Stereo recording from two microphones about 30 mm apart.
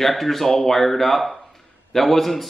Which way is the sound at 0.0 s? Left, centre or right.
Centre.